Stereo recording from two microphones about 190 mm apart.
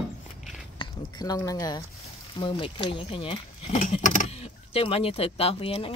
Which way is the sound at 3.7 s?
40° left (ahead or behind).